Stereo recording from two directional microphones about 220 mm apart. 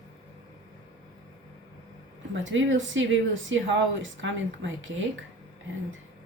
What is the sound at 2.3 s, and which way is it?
Speech, 60° right (ahead or behind).